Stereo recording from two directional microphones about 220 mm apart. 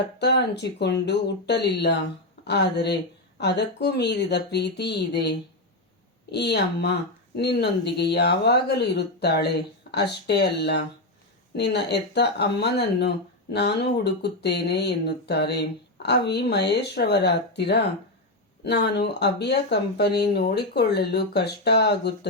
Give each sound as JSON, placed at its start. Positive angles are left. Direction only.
{"t": 0.2, "sound": "speech", "side_deg": 50}
{"t": 6.3, "sound": "speech", "side_deg": 50}